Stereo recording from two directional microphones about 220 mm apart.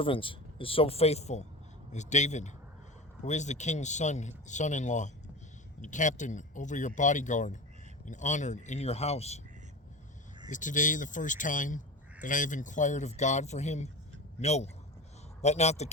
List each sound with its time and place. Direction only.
0.0 s speech: 25° left (ahead or behind)
10.5 s speech: 35° left (ahead or behind)